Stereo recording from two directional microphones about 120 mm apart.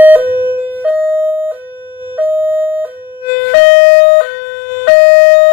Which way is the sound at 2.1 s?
15° right (ahead or behind).